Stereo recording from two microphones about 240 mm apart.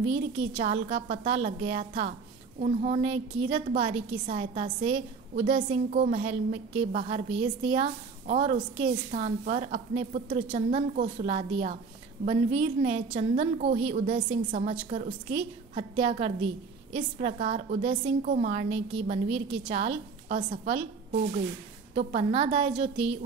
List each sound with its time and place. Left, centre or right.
0.0 s a woman's voice: right
21.9 s a woman's voice: right